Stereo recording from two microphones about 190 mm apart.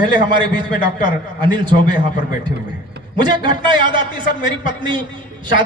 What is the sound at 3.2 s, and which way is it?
A man's voice, 25° right (ahead or behind).